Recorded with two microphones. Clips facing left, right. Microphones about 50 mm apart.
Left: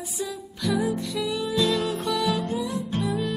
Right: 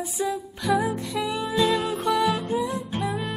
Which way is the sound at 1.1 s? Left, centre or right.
Right.